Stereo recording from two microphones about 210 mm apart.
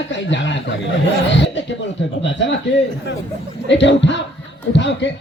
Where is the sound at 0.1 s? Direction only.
60° left (ahead or behind).